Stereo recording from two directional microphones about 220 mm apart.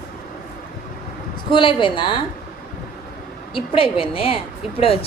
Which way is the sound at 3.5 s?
25° left (ahead or behind).